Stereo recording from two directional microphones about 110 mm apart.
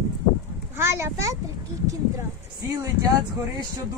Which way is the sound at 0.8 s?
25° right (ahead or behind).